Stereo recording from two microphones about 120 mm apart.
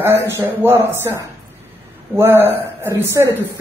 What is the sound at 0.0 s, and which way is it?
Speech, 20° right (ahead or behind).